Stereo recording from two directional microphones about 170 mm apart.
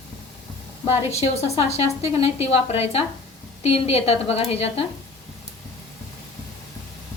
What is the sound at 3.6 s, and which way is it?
Speech, 35° left (ahead or behind).